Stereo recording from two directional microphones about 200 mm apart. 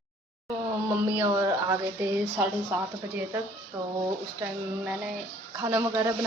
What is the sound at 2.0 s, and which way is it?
Speech, 10° right (ahead or behind).